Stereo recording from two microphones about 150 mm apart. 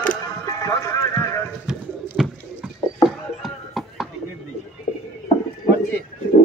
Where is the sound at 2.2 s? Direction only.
5° right (ahead or behind).